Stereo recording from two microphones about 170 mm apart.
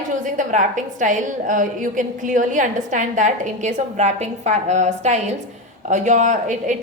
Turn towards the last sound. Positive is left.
turn(degrees=-45)  # may be behind; listen again after turning